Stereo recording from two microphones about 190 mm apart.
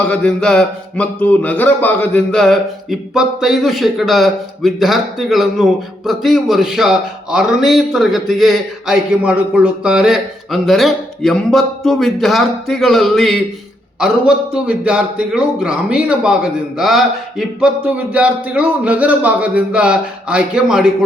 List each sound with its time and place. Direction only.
0.0 s a man's voice: 5° left (ahead or behind)